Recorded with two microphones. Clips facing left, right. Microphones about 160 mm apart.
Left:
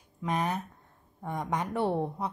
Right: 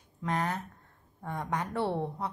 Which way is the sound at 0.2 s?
20° left (ahead or behind).